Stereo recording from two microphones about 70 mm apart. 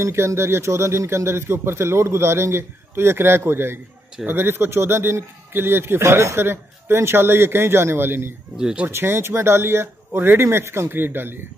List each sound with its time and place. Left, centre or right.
0.0 s a man's voice: right
8.5 s speech: centre
8.8 s a man's voice: right